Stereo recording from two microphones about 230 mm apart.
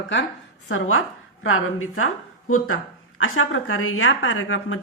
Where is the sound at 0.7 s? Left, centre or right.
Left.